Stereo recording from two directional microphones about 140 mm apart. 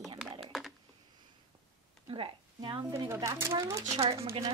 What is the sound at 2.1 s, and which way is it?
Speech, 35° right (ahead or behind).